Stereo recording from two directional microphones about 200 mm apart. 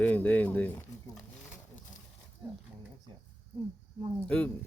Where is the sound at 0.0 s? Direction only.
10° left (ahead or behind).